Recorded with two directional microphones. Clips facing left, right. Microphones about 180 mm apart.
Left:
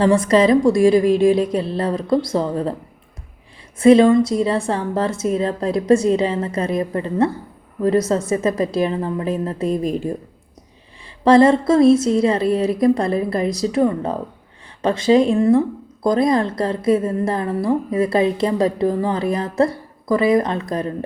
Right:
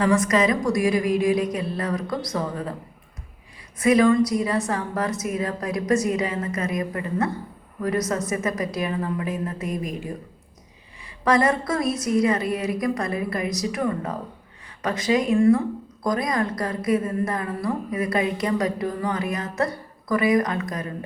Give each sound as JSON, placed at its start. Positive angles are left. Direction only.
{"t": 0.0, "sound": "a woman's voice", "side_deg": 30}
{"t": 3.8, "sound": "a woman's voice", "side_deg": 25}
{"t": 11.2, "sound": "a woman's voice", "side_deg": 30}